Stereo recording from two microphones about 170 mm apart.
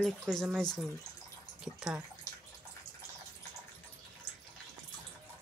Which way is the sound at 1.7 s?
5° right (ahead or behind).